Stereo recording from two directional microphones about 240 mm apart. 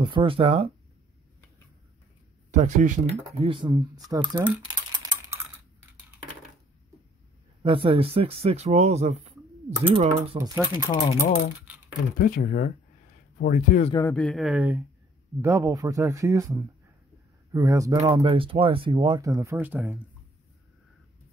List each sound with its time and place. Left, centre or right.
0.0 s speech: right
2.5 s speech: right
5.0 s typing: centre
7.6 s speech: right
10.3 s speech: centre
12.2 s speech: left
14.1 s speech: centre